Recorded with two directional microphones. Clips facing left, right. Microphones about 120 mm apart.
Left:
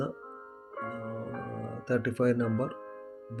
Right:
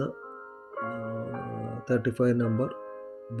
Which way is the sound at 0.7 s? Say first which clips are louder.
Right 4 dB; 40° right (ahead or behind).